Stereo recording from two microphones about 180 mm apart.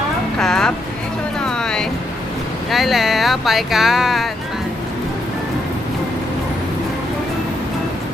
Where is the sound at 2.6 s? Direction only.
Centre (ahead or behind).